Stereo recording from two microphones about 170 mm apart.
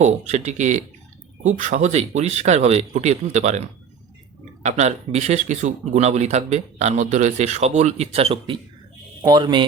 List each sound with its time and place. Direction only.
0.0 s speech: 40° right (ahead or behind)
4.6 s a man's voice: 40° right (ahead or behind)